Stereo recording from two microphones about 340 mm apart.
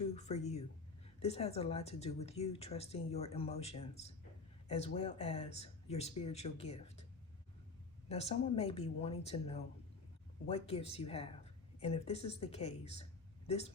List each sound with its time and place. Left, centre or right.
0.1 s a woman's voice: centre
8.1 s a woman's voice: centre